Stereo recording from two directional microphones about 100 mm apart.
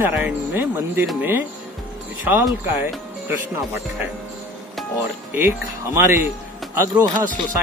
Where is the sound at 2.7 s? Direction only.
20° right (ahead or behind).